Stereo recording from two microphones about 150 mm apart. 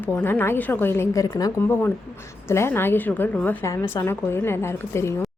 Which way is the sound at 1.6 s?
15° left (ahead or behind).